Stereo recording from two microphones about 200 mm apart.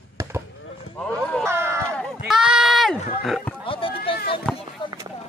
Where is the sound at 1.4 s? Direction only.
10° right (ahead or behind).